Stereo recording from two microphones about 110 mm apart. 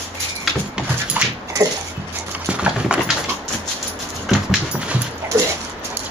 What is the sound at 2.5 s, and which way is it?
Horse, 10° right (ahead or behind).